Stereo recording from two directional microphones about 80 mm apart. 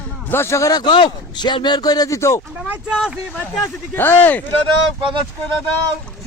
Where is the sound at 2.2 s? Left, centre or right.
Left.